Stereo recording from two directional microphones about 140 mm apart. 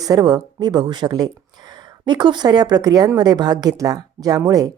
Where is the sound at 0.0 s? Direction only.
25° right (ahead or behind).